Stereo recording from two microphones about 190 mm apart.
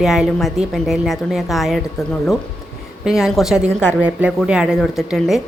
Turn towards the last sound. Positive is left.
turn(degrees=0)  # may be behind; listen again after turning